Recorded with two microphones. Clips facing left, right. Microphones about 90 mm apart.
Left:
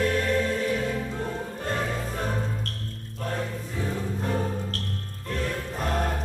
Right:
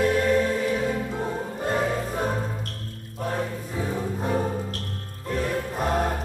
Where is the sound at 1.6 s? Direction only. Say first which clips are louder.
Right 5 dB; 10° right (ahead or behind).